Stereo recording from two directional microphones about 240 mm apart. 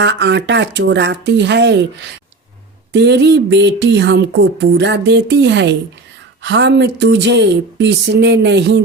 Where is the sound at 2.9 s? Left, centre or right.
Right.